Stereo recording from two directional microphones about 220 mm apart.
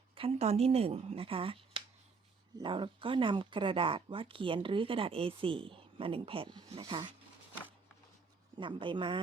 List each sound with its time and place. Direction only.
0.1 s speech: 25° right (ahead or behind)
8.5 s speech: 20° right (ahead or behind)